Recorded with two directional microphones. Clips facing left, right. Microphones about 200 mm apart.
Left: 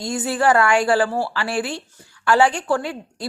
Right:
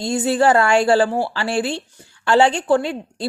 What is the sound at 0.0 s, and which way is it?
A woman's voice, 25° right (ahead or behind).